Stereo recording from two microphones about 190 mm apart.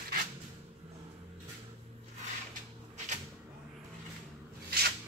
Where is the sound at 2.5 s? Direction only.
40° right (ahead or behind).